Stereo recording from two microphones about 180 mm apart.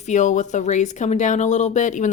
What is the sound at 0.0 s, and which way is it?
A woman's voice, 40° left (ahead or behind).